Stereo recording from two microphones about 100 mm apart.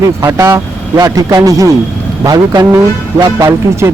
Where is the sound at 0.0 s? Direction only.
35° right (ahead or behind).